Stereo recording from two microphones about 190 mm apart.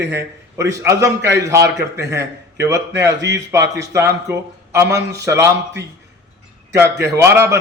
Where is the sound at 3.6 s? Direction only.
65° right (ahead or behind).